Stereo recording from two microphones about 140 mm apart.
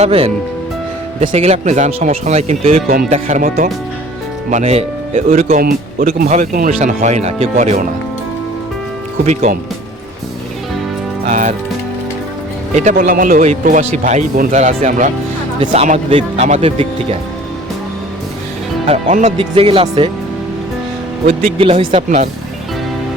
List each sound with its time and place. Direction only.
0.0 s speech: 45° right (ahead or behind)
1.3 s speech: 50° right (ahead or behind); by 3.7 s 65° right (ahead or behind)
4.5 s speech: 50° right (ahead or behind)
5.5 s speech: 90° right; by 7.9 s 60° right (ahead or behind)
9.2 s speech: 60° right (ahead or behind)
11.3 s speech: 60° right (ahead or behind)
12.7 s speech: 65° right (ahead or behind)
15.7 s speech: 50° right (ahead or behind)
19.4 s speech: 40° right (ahead or behind)
21.2 s speech: 40° right (ahead or behind)